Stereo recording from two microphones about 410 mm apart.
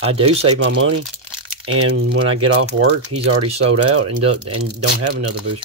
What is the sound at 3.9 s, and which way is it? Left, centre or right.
Speech, right.